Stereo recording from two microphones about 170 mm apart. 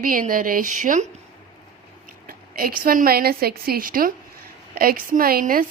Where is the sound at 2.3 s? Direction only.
60° right (ahead or behind).